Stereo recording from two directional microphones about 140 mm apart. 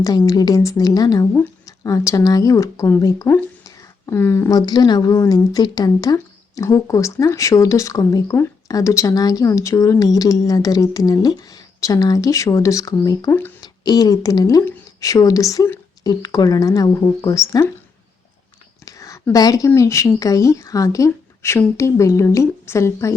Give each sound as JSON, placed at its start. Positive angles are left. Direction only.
{"t": 0.0, "sound": "speech", "side_deg": 25}
{"t": 18.9, "sound": "speech", "side_deg": 25}